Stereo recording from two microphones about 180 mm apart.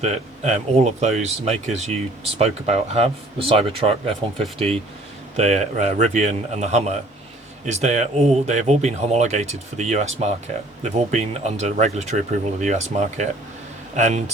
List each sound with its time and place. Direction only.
0.0 s speech: 40° right (ahead or behind)
5.4 s speech: 40° right (ahead or behind)